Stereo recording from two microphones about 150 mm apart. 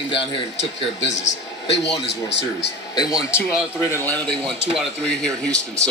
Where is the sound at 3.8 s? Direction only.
15° left (ahead or behind).